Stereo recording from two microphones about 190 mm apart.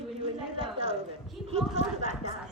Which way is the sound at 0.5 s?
30° right (ahead or behind).